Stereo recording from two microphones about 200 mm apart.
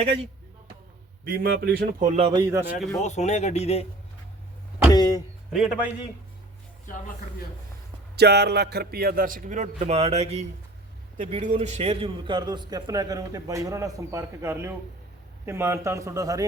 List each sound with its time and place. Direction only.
1.2 s a man's voice: 50° right (ahead or behind); by 2.4 s 30° right (ahead or behind)
2.4 s a man's voice: 15° right (ahead or behind)
3.0 s speech: 35° left (ahead or behind)
4.9 s speech: 20° left (ahead or behind)
5.5 s a man's voice: centre (ahead or behind)
8.1 s a man's voice: 55° right (ahead or behind); by 16.5 s 15° right (ahead or behind)